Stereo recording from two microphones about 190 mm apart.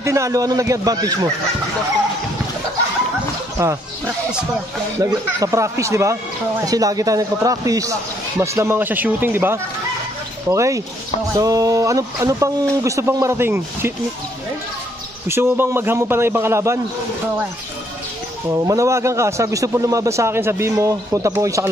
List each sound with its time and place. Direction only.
0.0 s a man's voice: 15° right (ahead or behind)
3.6 s a man's voice: 15° right (ahead or behind)
5.0 s a man's voice: 15° right (ahead or behind)
15.2 s a man's voice: 15° right (ahead or behind)
18.5 s a man's voice: 20° right (ahead or behind)